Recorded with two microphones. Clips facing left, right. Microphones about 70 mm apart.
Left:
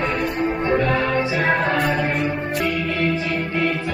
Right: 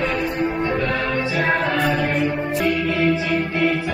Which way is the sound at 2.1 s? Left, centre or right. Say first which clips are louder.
Right 2 dB; centre.